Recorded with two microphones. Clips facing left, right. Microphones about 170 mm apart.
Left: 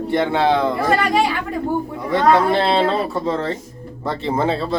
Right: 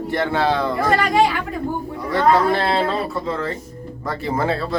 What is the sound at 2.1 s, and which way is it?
A man's voice, 20° left (ahead or behind).